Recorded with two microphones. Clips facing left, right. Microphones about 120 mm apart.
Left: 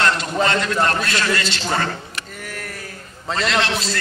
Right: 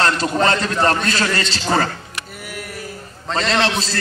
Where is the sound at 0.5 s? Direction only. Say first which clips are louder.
Right 2 dB; 35° right (ahead or behind).